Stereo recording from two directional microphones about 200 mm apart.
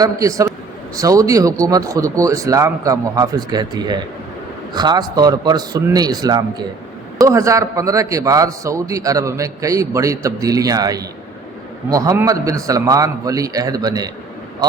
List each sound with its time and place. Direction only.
0.0 s a man's voice: 15° right (ahead or behind)